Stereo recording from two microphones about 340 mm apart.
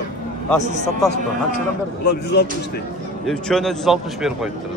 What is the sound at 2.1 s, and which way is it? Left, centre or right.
Speech, left.